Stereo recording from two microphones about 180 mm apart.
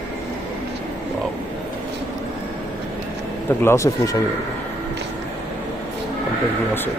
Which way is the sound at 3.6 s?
15° left (ahead or behind).